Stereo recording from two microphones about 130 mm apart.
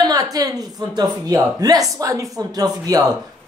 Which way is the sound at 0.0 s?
30° right (ahead or behind).